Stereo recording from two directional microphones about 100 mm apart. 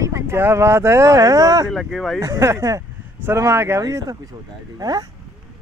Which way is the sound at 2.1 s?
30° right (ahead or behind).